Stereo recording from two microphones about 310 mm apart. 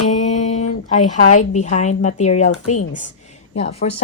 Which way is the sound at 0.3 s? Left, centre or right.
Left.